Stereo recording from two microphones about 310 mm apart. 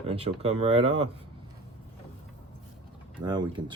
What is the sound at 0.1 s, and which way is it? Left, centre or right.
Speech, centre.